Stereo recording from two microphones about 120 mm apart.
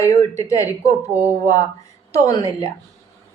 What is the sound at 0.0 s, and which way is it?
Speech, 25° left (ahead or behind).